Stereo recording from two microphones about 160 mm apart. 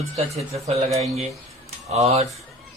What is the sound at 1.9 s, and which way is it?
Speech, 40° right (ahead or behind).